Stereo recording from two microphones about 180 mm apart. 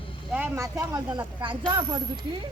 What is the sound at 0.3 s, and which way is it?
Speech, 15° right (ahead or behind).